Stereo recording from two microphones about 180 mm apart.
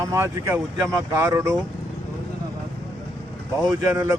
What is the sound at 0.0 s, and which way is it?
Speech, 15° right (ahead or behind).